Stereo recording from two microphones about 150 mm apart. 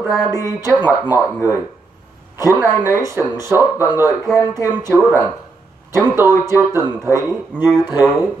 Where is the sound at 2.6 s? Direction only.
15° right (ahead or behind).